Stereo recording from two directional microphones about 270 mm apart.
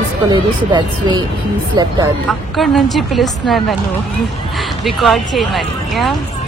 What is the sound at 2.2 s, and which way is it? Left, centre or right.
Speech, centre.